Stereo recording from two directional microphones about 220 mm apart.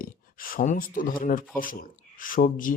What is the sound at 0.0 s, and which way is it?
A man's voice, 40° left (ahead or behind).